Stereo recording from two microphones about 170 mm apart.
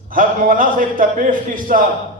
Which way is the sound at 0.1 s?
55° right (ahead or behind).